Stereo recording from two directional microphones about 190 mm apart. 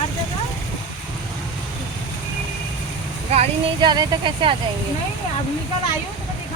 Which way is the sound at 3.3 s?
35° right (ahead or behind).